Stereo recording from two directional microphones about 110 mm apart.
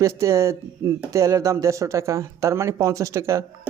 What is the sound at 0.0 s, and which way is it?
Speech, 25° right (ahead or behind).